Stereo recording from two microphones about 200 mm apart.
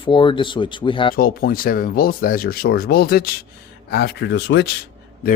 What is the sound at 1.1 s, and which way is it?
Speech, 45° left (ahead or behind).